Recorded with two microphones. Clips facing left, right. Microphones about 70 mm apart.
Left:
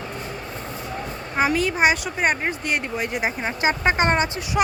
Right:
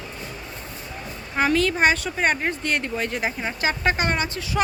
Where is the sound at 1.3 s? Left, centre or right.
Centre.